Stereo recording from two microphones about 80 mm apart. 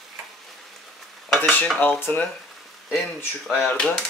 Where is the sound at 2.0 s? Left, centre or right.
Centre.